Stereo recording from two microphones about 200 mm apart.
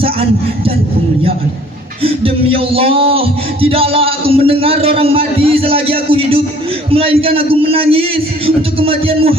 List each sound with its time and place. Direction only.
0.0 s a man's voice: 30° right (ahead or behind)
2.0 s a man's voice: 30° right (ahead or behind)